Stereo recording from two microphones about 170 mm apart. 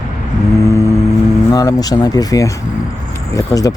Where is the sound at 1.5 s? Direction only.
20° left (ahead or behind).